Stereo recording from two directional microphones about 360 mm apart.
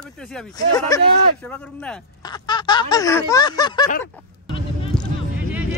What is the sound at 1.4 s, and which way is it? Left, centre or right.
Speech, centre.